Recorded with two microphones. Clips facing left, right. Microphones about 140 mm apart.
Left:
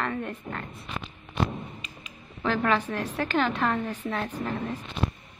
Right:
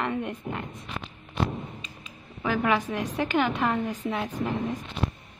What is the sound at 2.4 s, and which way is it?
A woman's voice, 10° right (ahead or behind).